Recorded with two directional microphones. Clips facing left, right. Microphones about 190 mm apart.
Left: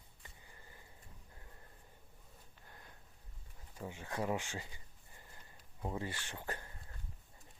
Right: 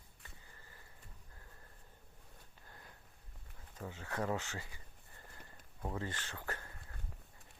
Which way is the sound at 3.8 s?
15° left (ahead or behind).